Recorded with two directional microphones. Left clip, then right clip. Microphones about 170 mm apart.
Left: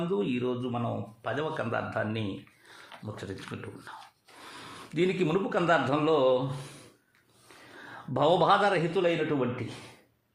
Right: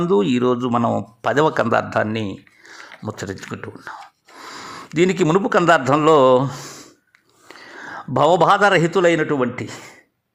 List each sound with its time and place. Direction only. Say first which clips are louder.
0.1 s a man's voice: right 15 dB; 55° right (ahead or behind)
7.4 s speech: right 12 dB; 40° right (ahead or behind)